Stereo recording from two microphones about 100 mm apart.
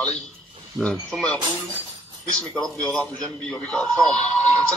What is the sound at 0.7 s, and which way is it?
Speech, centre (ahead or behind).